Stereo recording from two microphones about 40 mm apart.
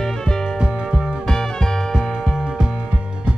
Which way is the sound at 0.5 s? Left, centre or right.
Centre.